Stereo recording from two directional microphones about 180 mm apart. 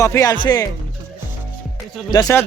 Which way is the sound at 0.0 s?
15° left (ahead or behind).